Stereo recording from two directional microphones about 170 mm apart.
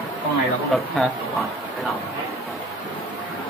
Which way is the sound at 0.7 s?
Centre (ahead or behind).